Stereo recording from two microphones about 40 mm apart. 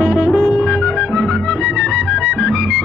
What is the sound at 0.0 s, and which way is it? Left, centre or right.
Music, centre.